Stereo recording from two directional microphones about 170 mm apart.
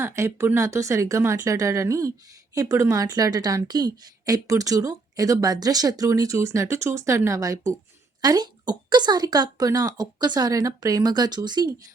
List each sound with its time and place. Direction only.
0.0 s speech: 15° right (ahead or behind)